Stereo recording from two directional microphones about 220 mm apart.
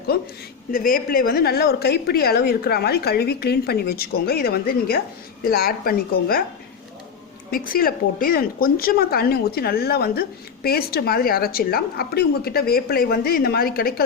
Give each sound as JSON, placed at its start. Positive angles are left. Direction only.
{"t": 0.1, "sound": "speech", "side_deg": 45}
{"t": 7.5, "sound": "speech", "side_deg": 40}